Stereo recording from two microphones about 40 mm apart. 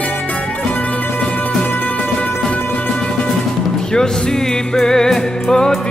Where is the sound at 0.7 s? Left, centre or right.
Left.